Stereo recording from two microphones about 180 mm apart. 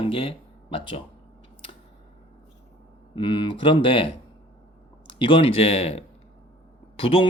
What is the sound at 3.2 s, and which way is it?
Speech, 25° left (ahead or behind).